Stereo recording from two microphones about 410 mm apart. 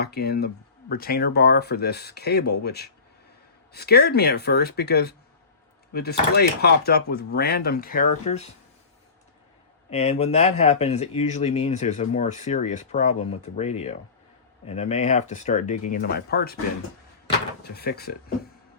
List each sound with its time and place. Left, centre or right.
0.0 s speech: left
9.9 s speech: centre
17.6 s speech: left